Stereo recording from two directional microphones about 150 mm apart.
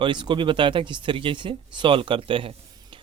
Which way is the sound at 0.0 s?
30° right (ahead or behind).